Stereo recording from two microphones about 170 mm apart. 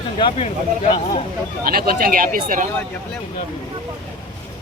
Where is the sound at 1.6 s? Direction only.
60° right (ahead or behind).